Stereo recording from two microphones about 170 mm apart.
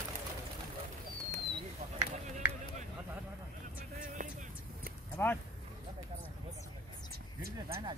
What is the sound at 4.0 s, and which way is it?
Music, 50° right (ahead or behind).